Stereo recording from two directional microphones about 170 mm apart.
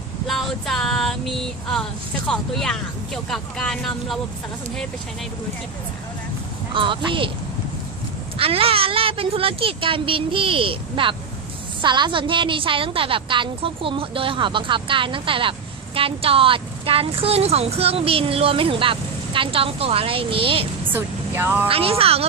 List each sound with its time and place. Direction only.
0.3 s female singing: centre (ahead or behind)
6.7 s a woman's voice: 30° right (ahead or behind)
8.4 s a woman's voice: 35° right (ahead or behind)
20.9 s speech: 15° right (ahead or behind)
21.7 s a woman's voice: 35° right (ahead or behind)